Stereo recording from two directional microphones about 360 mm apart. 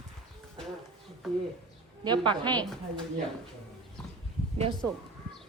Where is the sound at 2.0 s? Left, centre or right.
Centre.